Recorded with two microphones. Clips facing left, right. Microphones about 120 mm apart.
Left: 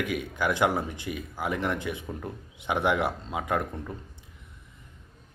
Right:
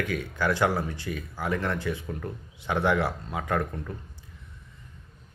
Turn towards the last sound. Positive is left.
turn(degrees=15)  # may be behind; listen again after turning